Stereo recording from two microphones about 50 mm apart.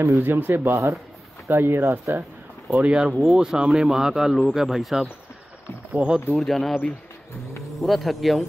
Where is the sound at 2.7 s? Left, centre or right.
Right.